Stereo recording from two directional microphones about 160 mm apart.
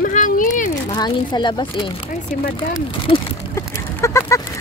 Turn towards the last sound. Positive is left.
turn(degrees=15)  # may be behind; listen again after turning